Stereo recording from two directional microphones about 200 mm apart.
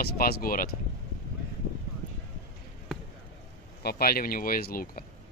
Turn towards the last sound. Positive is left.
turn(degrees=45)  # may be behind; listen again after turning